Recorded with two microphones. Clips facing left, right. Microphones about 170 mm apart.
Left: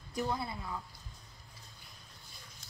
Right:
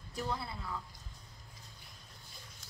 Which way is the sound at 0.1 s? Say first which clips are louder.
Left 3 dB; 15° left (ahead or behind).